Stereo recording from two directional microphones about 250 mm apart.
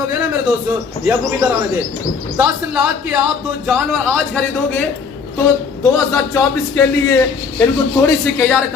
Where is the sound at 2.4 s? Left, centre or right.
Centre.